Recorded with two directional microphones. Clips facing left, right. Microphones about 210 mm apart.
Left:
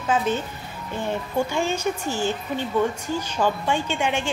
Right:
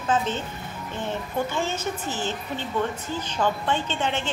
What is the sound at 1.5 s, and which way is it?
A woman's voice, 15° left (ahead or behind).